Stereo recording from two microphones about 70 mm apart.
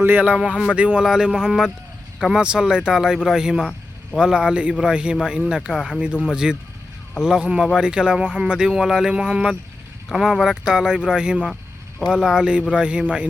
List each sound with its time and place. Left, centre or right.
0.0 s speech: right
0.3 s speech: centre